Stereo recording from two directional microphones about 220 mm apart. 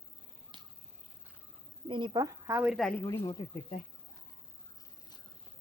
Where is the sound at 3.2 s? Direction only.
20° left (ahead or behind).